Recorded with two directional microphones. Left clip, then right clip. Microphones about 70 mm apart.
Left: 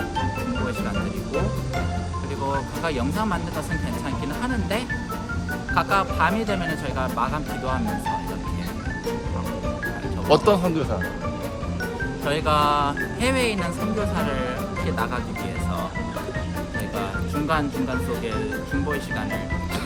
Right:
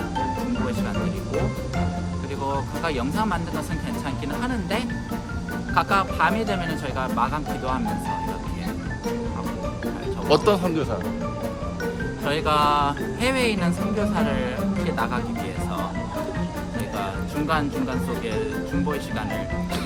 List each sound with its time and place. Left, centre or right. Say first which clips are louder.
2.8 s speech: right 2 dB; centre
5.7 s speech: even; centre
10.2 s speech: left 1 dB; left
12.2 s speech: even; right